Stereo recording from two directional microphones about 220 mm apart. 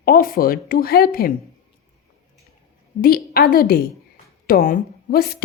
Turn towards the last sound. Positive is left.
turn(degrees=45)  # may be behind; listen again after turning